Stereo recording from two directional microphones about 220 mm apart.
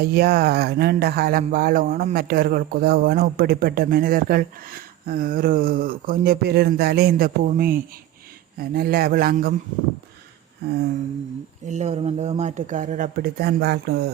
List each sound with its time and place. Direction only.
0.0 s speech: 45° right (ahead or behind)
11.6 s speech: 30° right (ahead or behind)